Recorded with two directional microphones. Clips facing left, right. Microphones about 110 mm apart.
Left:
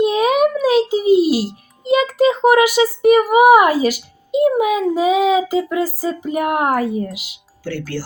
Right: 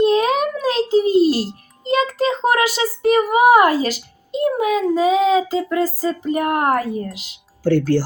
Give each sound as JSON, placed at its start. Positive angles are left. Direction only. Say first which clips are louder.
{"t": 0.0, "sound": "music", "louder": "left 1 dB", "side_deg": 10}
{"t": 2.1, "sound": "speech", "louder": "left 5 dB", "side_deg": 10}
{"t": 7.6, "sound": "speech", "louder": "right 9 dB", "side_deg": -45}